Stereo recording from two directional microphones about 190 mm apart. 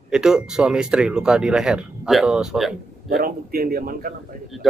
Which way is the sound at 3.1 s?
55° right (ahead or behind).